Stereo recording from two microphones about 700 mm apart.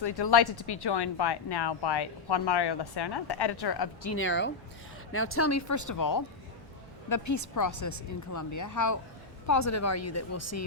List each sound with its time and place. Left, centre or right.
0.0 s speech: left
4.0 s speech: centre